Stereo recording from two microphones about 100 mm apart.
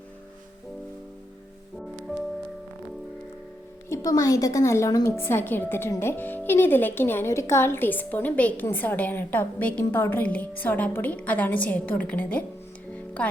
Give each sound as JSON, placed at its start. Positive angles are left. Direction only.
{"t": 2.1, "sound": "music", "side_deg": -5}
{"t": 3.8, "sound": "a woman's voice", "side_deg": 30}